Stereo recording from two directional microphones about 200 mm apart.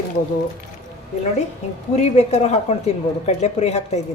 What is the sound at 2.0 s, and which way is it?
A woman's voice, 35° left (ahead or behind).